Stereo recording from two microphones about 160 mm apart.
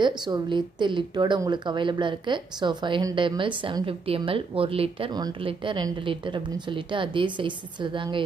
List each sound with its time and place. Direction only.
0.0 s a woman's voice: 30° right (ahead or behind)